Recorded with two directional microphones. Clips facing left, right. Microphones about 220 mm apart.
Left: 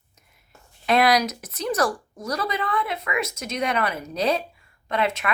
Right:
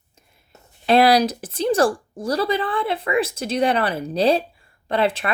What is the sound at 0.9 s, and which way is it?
Speech, 30° right (ahead or behind).